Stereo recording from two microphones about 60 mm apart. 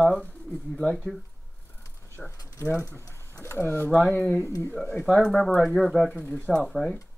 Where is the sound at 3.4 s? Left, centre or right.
Left.